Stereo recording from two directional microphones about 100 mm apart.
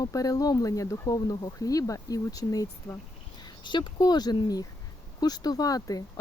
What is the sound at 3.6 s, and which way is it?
Speech, 50° left (ahead or behind).